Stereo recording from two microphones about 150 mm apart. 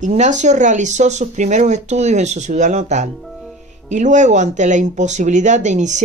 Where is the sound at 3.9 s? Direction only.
55° right (ahead or behind).